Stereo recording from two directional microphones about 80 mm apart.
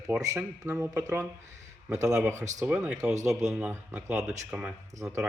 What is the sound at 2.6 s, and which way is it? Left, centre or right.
Speech, centre.